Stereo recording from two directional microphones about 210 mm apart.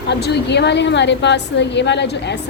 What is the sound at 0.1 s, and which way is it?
Speech, 55° left (ahead or behind).